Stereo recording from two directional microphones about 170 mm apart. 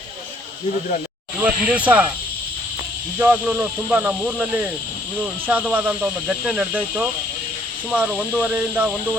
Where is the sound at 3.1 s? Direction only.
10° right (ahead or behind).